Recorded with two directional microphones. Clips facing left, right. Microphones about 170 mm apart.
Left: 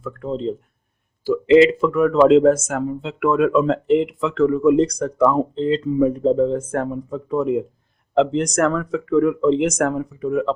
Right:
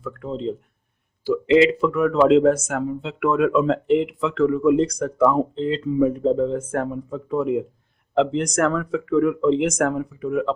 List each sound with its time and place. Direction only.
0.0 s speech: 40° left (ahead or behind)